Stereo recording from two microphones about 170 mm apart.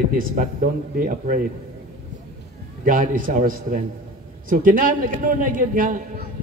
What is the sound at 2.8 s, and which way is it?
A man's voice, 50° right (ahead or behind).